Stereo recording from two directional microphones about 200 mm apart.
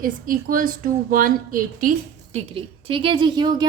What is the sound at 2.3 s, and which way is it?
A woman's voice, 25° right (ahead or behind).